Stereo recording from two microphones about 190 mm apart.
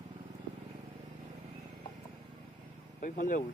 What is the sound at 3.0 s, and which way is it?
Speech, 45° left (ahead or behind).